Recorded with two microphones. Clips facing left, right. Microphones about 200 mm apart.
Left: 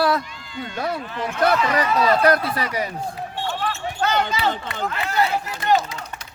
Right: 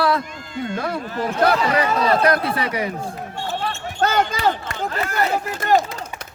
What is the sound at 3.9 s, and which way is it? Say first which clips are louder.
Speech: right 3 dB; 45° right (ahead or behind).